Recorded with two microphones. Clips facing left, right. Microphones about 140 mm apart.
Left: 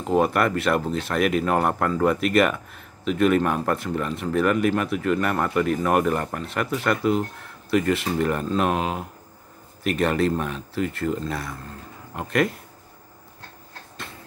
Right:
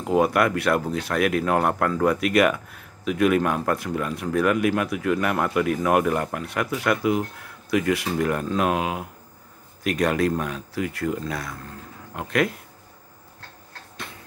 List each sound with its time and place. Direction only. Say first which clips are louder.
0.0 s speech: even; 5° right (ahead or behind)